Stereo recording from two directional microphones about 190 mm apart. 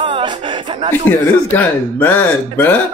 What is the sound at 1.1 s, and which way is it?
Speech, 10° left (ahead or behind).